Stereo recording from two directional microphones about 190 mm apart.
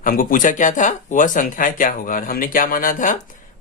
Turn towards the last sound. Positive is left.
turn(degrees=45)  # may be behind; listen again after turning